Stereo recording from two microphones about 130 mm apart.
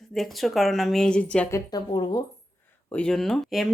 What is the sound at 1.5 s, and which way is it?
Speech, 30° left (ahead or behind).